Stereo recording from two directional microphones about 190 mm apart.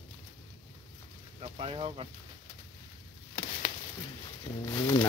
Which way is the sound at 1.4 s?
30° right (ahead or behind).